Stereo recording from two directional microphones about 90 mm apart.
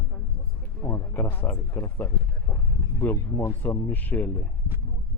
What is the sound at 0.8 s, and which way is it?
Speech, 35° left (ahead or behind).